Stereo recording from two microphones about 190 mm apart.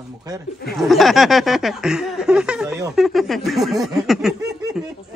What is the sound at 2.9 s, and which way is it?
Speech, centre (ahead or behind).